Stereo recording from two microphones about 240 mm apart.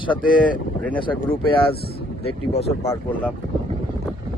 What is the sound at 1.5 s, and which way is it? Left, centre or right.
Speech, left.